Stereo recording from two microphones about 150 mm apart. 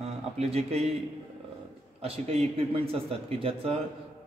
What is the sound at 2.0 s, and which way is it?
A man's voice, 40° right (ahead or behind).